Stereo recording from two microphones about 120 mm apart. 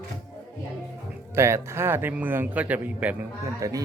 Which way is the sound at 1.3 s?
20° right (ahead or behind).